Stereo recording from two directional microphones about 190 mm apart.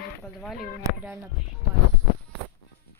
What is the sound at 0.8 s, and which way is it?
Speech, 10° right (ahead or behind).